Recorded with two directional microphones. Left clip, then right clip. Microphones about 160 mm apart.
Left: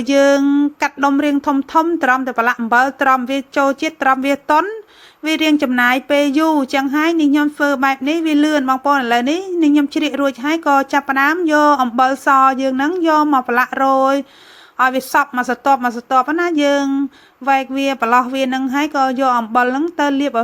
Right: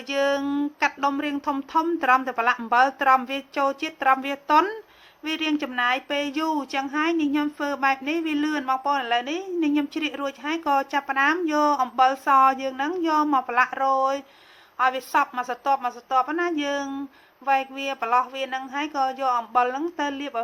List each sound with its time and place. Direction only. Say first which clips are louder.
0.0 s speech: left 11 dB; 35° left (ahead or behind)
0.4 s a sound: left 12 dB; 20° left (ahead or behind)
0.8 s speech: left 8 dB; 35° left (ahead or behind)